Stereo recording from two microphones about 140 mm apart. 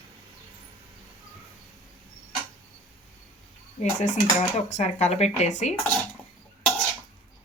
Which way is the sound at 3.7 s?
55° left (ahead or behind).